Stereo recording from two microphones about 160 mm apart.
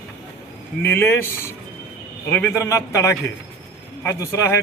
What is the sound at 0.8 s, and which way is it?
A man's voice, 15° left (ahead or behind).